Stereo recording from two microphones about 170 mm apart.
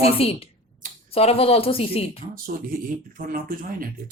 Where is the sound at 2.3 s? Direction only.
55° right (ahead or behind).